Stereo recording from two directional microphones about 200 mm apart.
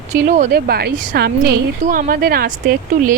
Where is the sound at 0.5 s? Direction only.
50° right (ahead or behind).